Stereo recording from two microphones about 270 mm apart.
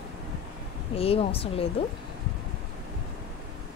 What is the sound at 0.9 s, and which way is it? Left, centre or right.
Speech, left.